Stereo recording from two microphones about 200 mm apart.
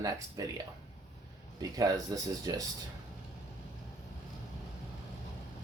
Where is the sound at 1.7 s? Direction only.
20° right (ahead or behind).